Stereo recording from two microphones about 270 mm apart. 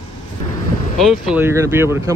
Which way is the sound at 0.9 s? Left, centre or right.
Centre.